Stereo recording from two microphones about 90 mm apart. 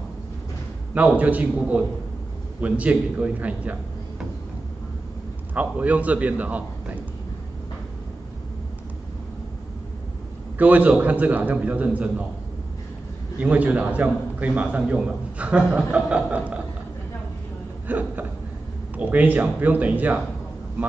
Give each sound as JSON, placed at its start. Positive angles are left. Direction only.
{"t": 0.9, "sound": "a man's voice", "side_deg": -15}
{"t": 5.5, "sound": "a man's voice", "side_deg": -15}
{"t": 10.6, "sound": "a man's voice", "side_deg": -15}
{"t": 13.4, "sound": "a man's voice", "side_deg": -15}
{"t": 17.8, "sound": "a man's voice", "side_deg": -20}